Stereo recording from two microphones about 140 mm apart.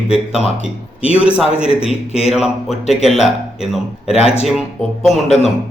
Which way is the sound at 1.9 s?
45° left (ahead or behind).